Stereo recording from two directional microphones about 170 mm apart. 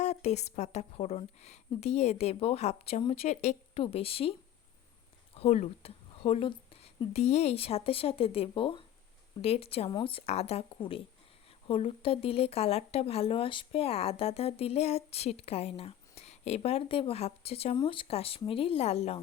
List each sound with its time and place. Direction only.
0.0 s speech: 40° left (ahead or behind)
5.4 s speech: 35° left (ahead or behind)